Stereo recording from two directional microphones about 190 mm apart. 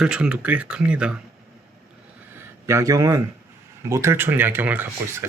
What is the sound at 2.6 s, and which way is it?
Speech, 15° right (ahead or behind).